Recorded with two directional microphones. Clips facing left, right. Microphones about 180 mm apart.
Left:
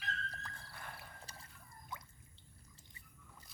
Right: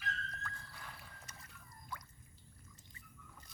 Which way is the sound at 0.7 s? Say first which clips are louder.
Left 2 dB; 55° left (ahead or behind).